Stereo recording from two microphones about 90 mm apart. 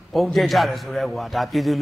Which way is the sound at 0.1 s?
Centre (ahead or behind).